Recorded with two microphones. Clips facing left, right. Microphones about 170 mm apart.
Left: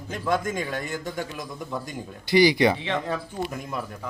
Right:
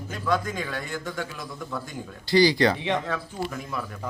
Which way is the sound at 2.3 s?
20° left (ahead or behind).